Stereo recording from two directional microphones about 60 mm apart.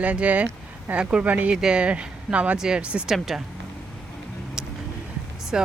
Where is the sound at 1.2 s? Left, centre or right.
Right.